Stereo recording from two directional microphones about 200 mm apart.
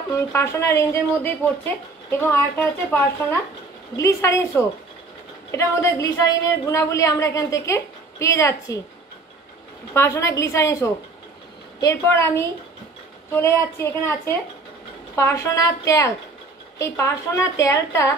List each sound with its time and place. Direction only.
0.1 s a woman's voice: 15° left (ahead or behind)
9.9 s a woman's voice: 15° left (ahead or behind)